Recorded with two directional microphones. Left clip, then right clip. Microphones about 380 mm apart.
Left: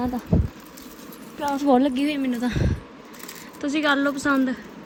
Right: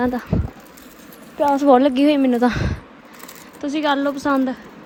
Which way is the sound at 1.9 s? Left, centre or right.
Centre.